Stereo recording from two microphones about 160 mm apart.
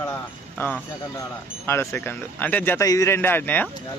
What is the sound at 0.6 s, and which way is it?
Speech, 10° left (ahead or behind).